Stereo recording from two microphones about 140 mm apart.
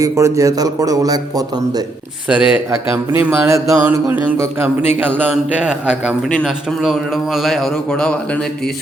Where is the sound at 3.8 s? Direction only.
10° right (ahead or behind).